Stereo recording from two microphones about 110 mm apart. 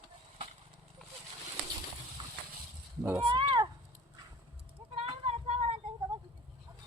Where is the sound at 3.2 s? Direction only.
55° right (ahead or behind).